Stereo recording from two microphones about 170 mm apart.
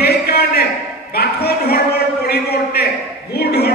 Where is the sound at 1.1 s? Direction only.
65° left (ahead or behind).